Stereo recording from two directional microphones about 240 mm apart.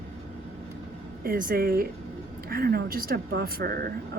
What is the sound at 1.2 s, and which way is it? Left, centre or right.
Speech, right.